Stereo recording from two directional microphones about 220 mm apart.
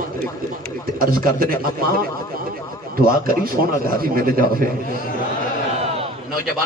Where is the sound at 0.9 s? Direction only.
40° right (ahead or behind).